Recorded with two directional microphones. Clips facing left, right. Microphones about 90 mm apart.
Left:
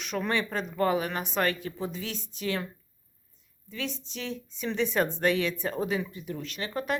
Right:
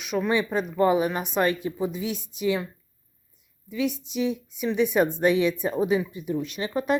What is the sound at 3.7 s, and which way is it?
Speech, 10° right (ahead or behind).